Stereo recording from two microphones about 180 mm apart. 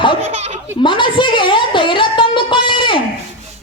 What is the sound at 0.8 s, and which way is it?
Music, 25° left (ahead or behind).